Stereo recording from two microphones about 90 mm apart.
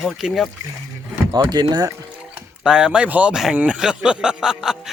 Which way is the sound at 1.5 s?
50° right (ahead or behind).